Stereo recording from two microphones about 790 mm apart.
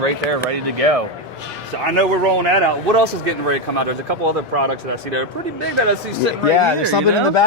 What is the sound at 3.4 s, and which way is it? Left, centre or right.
Speech, right.